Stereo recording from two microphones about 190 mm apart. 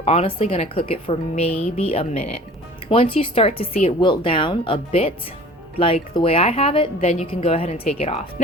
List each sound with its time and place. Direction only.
0.0 s speech: 30° left (ahead or behind)